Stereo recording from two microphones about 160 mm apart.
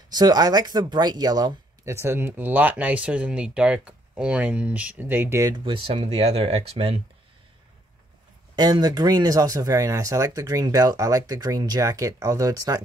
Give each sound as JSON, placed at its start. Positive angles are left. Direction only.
{"t": 0.1, "sound": "speech", "side_deg": -25}
{"t": 5.6, "sound": "speech", "side_deg": -35}
{"t": 8.5, "sound": "speech", "side_deg": -25}